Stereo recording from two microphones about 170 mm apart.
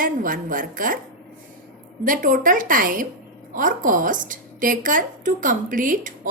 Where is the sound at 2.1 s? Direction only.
50° right (ahead or behind).